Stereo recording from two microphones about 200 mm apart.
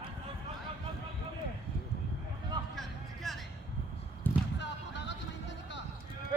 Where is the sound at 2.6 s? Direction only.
25° right (ahead or behind).